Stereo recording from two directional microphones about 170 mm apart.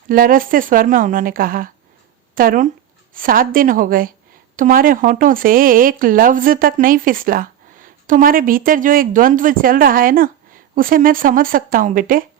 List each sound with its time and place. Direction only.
0.1 s a woman's voice: 55° right (ahead or behind)